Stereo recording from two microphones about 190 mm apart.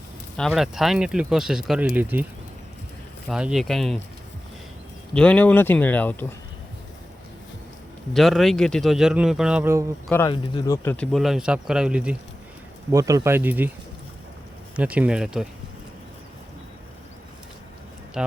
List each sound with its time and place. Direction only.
0.3 s speech: centre (ahead or behind)
3.2 s speech: 5° right (ahead or behind)
5.1 s speech: 5° left (ahead or behind)
8.1 s speech: centre (ahead or behind)
10.1 s speech: 15° left (ahead or behind)
10.8 s speech: 5° left (ahead or behind)
12.9 s speech: 20° right (ahead or behind)
14.8 s speech: 5° right (ahead or behind)